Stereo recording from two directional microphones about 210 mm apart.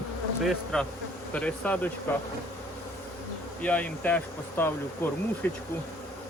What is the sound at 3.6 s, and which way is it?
Insect, 5° left (ahead or behind).